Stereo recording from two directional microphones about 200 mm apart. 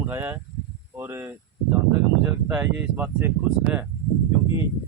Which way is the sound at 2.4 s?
10° right (ahead or behind).